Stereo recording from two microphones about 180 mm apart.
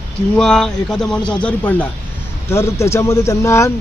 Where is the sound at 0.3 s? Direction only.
5° left (ahead or behind).